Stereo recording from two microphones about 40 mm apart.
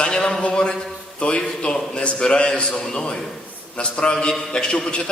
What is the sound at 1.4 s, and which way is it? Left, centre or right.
A man's voice, centre.